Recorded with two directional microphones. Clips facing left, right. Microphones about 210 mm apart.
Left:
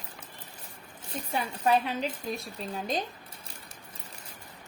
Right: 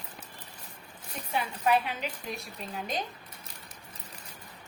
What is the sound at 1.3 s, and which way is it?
A woman's voice, 35° left (ahead or behind).